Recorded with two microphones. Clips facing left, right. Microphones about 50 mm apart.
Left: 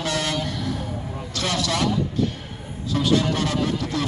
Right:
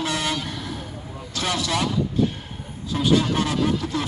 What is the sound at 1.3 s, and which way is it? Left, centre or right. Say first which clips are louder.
Vehicle: even; centre.